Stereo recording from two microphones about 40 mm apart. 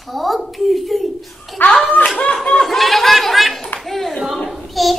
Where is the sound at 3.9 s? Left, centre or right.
Centre.